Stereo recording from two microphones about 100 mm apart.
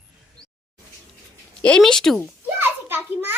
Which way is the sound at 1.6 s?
5° left (ahead or behind).